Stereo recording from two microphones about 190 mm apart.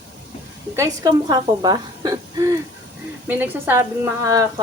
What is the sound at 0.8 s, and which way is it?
Speech, 20° right (ahead or behind).